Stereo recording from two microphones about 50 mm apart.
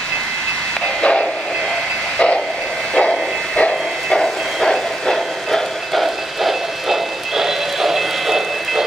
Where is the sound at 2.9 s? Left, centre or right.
Centre.